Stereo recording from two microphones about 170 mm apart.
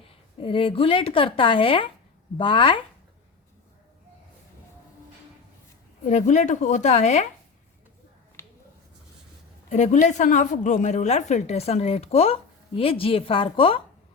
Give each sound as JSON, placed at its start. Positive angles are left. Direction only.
{"t": 0.1, "sound": "a woman's voice", "side_deg": 30}
{"t": 6.1, "sound": "speech", "side_deg": 45}
{"t": 9.6, "sound": "a woman's voice", "side_deg": 45}